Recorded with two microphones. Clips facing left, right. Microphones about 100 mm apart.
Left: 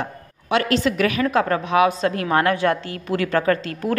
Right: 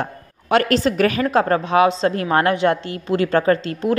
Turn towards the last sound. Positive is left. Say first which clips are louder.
# right 3 dB
turn(degrees=-30)  # may be behind; listen again after turning